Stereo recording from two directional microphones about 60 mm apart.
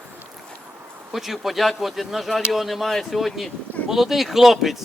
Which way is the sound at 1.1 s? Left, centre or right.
Centre.